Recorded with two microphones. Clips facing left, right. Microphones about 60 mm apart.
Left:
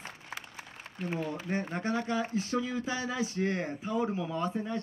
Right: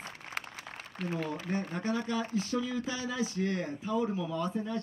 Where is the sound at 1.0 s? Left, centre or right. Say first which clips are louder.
Even; right.